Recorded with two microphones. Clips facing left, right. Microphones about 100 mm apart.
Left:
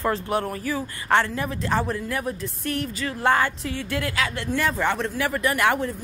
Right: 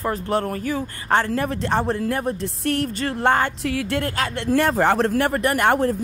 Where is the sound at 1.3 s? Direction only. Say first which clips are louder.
Right 3 dB; 55° right (ahead or behind).